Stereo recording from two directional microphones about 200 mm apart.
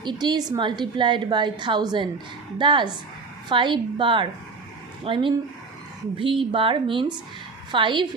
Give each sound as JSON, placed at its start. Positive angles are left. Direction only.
{"t": 0.0, "sound": "a woman's voice", "side_deg": -20}